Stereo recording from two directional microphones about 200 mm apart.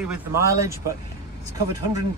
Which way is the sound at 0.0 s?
10° right (ahead or behind).